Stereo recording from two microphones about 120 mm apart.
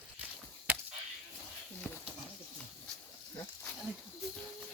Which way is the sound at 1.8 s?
15° left (ahead or behind).